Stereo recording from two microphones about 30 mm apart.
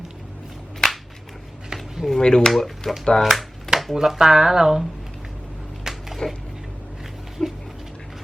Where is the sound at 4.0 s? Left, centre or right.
Centre.